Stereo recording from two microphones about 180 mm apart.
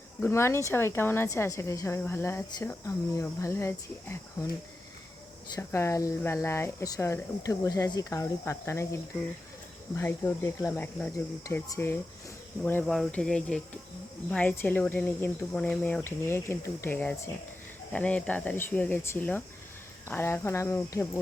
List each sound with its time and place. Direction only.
0.2 s a woman's voice: 15° left (ahead or behind)
5.5 s a woman's voice: 15° left (ahead or behind)